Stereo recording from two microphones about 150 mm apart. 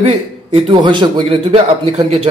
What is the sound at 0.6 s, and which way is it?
A man's voice, 35° right (ahead or behind).